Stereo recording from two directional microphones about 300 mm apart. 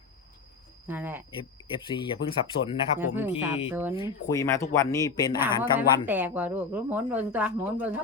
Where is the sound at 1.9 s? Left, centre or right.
Centre.